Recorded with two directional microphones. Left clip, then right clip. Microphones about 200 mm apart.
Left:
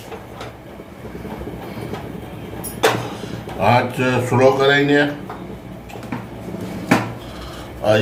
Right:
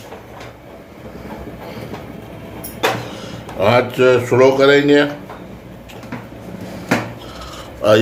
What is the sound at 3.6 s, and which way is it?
Speech, 45° right (ahead or behind).